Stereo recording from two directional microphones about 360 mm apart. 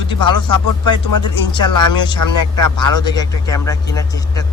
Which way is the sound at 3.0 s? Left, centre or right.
Centre.